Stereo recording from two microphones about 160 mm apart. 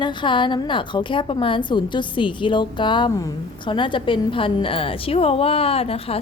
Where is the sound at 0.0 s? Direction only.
30° left (ahead or behind).